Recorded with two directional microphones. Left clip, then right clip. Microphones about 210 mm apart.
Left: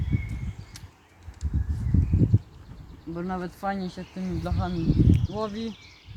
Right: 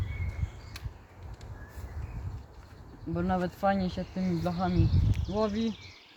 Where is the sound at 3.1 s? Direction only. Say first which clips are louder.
Right 2 dB; 35° right (ahead or behind); by 5.2 s 10° right (ahead or behind).